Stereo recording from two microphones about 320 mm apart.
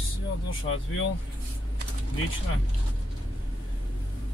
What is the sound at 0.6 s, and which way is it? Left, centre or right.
Speech, left.